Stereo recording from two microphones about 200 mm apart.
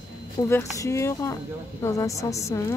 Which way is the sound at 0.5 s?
15° left (ahead or behind).